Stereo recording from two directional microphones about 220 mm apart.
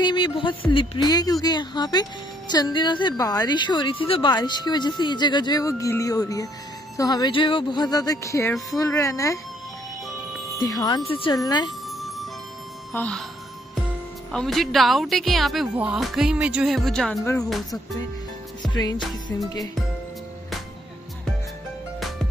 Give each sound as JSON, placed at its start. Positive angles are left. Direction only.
{"t": 0.0, "sound": "speech", "side_deg": 20}
{"t": 10.6, "sound": "speech", "side_deg": 15}
{"t": 12.9, "sound": "speech", "side_deg": 5}
{"t": 14.3, "sound": "speech", "side_deg": 0}
{"t": 18.6, "sound": "music", "side_deg": 20}
{"t": 19.2, "sound": "speech", "side_deg": 15}